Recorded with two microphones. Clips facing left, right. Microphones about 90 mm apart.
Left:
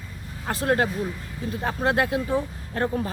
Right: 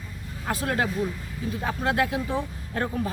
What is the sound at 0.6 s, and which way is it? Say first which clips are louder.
A man's voice: left 4 dB; 30° left (ahead or behind).